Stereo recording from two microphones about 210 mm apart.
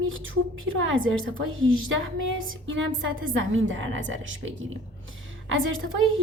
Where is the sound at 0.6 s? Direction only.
70° right (ahead or behind).